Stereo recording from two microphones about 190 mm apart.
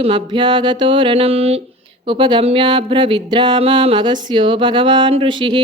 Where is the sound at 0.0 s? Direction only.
25° right (ahead or behind).